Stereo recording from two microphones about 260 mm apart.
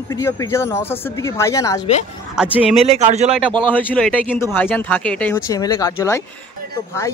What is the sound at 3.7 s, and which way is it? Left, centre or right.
Speech, centre.